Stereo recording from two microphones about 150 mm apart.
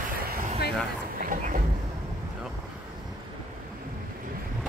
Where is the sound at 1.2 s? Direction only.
65° right (ahead or behind).